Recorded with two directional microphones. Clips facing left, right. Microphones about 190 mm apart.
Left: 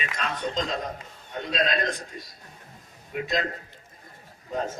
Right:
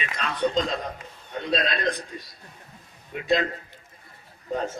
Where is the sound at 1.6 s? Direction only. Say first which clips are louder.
Even; 40° left (ahead or behind).